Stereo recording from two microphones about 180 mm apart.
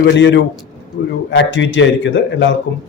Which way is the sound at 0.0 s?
85° left.